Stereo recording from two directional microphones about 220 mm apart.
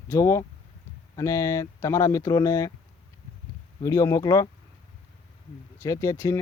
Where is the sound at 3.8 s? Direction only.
15° left (ahead or behind).